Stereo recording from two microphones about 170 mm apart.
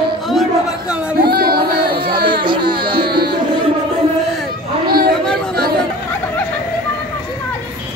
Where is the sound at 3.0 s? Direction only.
65° right (ahead or behind).